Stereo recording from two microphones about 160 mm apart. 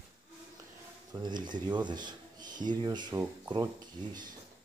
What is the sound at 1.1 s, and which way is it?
Speech, 25° right (ahead or behind).